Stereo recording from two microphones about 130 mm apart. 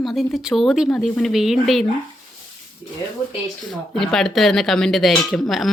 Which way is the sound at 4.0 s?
5° left (ahead or behind).